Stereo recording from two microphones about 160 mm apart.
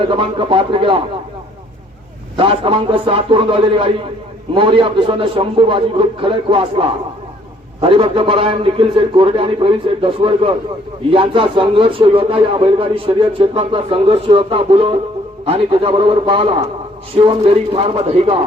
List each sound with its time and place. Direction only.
0.0 s a man's voice: 30° right (ahead or behind)
2.4 s a man's voice: 35° right (ahead or behind)